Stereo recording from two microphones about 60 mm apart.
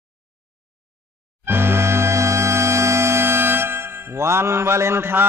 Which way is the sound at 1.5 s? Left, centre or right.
Right.